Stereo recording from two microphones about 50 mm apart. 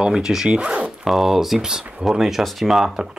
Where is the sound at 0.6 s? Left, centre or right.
Right.